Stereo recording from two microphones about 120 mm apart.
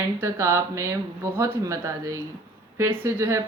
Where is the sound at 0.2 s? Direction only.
20° right (ahead or behind).